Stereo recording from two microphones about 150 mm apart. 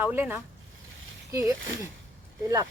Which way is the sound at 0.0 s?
10° right (ahead or behind).